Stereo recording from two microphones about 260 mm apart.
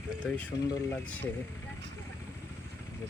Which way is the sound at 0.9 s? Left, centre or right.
Centre.